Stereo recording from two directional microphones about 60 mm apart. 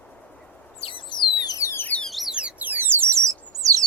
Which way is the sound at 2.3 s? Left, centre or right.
Right.